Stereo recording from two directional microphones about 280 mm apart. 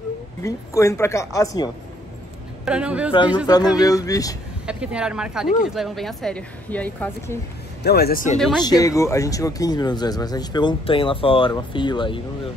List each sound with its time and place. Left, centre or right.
0.4 s speech: centre
2.6 s speech: centre
3.4 s speech: centre
4.6 s speech: centre
7.8 s speech: left
8.4 s speech: centre
8.6 s speech: centre